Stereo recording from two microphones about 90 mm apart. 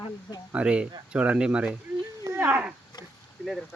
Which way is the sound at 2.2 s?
30° right (ahead or behind).